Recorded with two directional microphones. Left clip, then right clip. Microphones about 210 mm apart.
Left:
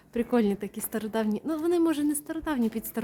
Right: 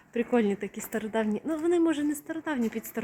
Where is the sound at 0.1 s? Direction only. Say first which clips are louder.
Even; 5° left (ahead or behind).